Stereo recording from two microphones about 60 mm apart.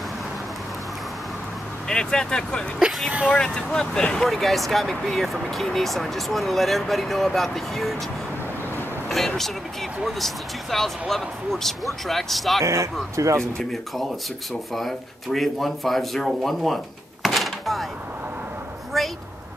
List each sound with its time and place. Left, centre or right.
1.9 s speech: centre
4.3 s speech: centre
9.1 s speech: centre
12.6 s speech: right
13.4 s speech: centre
18.9 s a woman's voice: centre